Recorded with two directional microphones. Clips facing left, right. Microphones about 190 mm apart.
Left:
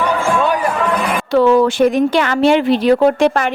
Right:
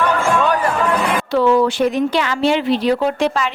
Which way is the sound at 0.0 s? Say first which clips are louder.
Left 1 dB; 10° left (ahead or behind).